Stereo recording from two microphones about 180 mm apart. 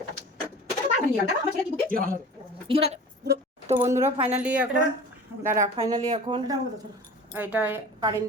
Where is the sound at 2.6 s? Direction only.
35° right (ahead or behind).